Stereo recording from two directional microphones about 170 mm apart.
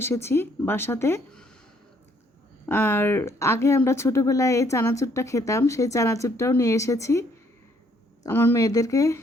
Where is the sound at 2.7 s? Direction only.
10° left (ahead or behind).